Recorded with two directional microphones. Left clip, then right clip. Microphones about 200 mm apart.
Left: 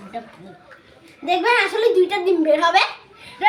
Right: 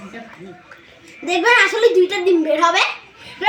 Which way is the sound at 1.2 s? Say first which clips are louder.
Right 4 dB; 30° left (ahead or behind).